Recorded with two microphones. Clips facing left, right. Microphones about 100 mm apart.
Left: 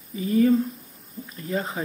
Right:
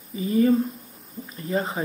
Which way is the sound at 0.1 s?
5° right (ahead or behind).